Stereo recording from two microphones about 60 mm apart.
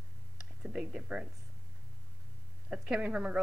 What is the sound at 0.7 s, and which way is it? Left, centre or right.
Speech, centre.